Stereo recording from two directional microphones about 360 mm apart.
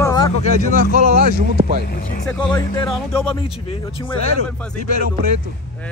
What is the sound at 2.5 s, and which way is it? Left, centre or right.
Speech, centre.